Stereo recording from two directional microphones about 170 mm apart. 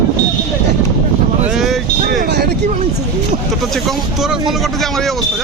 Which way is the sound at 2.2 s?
70° right (ahead or behind).